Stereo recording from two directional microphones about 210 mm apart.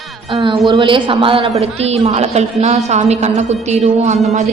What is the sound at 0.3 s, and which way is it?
A woman's voice, 25° right (ahead or behind).